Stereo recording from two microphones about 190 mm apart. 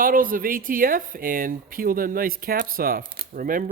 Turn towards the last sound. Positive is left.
turn(degrees=-45)  # may be behind; listen again after turning